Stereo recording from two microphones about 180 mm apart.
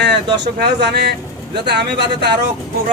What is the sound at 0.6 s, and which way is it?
Speech, 70° right (ahead or behind).